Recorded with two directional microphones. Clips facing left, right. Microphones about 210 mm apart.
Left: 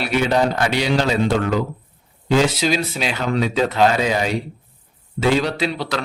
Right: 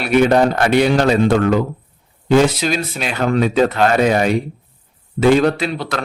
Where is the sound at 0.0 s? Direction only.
55° right (ahead or behind).